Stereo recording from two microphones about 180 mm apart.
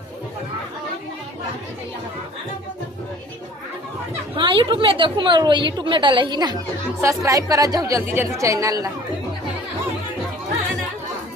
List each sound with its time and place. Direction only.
4.4 s a woman's voice: 25° right (ahead or behind)